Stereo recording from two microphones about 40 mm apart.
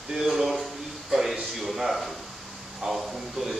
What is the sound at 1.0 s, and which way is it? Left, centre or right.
A man's voice, centre.